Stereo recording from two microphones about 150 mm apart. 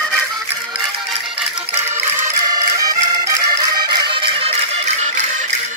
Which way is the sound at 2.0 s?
15° right (ahead or behind).